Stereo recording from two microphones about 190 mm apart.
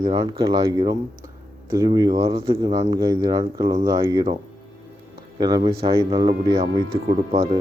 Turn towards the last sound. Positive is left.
turn(degrees=-30)  # may be behind; listen again after turning